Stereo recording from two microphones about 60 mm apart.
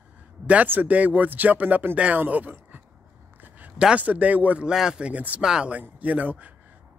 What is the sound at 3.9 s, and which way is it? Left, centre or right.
Speech, right.